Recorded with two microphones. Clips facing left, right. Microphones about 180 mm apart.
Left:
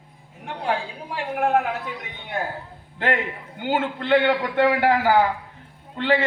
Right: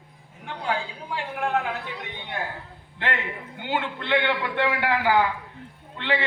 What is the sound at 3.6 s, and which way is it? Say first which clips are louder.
A man's voice: left 5 dB; 50° left (ahead or behind).